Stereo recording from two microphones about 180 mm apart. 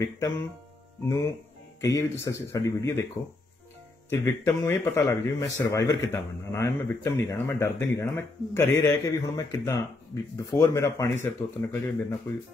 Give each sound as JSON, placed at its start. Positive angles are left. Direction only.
{"t": 0.0, "sound": "a man's voice", "side_deg": 15}
{"t": 4.1, "sound": "a man's voice", "side_deg": 15}